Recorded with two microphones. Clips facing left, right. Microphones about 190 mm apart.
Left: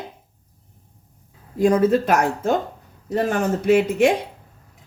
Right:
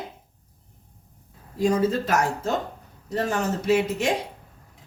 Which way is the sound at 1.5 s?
55° left (ahead or behind).